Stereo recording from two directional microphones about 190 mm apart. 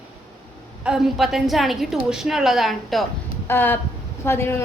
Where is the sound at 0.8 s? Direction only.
5° right (ahead or behind).